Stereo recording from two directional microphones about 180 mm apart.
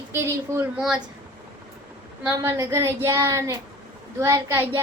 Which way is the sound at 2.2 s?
15° right (ahead or behind).